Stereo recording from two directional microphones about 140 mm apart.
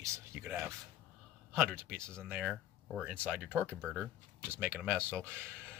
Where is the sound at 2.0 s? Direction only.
5° left (ahead or behind).